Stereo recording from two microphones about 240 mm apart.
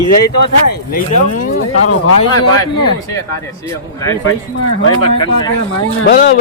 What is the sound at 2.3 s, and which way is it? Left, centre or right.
Speech, left.